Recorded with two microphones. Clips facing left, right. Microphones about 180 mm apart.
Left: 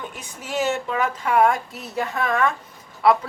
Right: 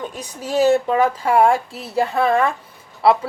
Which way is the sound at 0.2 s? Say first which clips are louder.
Right 8 dB; 35° right (ahead or behind).